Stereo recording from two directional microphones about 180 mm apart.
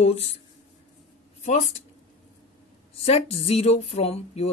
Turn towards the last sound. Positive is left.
turn(degrees=35)  # may be behind; listen again after turning